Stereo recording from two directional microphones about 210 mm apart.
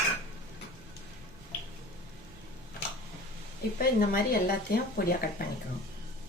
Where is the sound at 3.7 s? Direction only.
45° left (ahead or behind).